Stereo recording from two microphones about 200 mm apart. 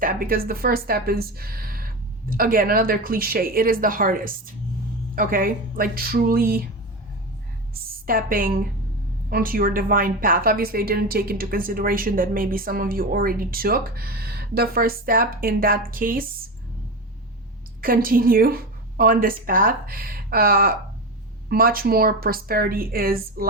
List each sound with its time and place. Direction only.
0.0 s a woman's voice: 45° right (ahead or behind)
7.9 s a woman's voice: 45° right (ahead or behind)
17.7 s a woman's voice: 45° right (ahead or behind)